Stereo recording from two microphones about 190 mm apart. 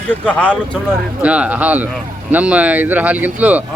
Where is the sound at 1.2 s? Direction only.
5° right (ahead or behind).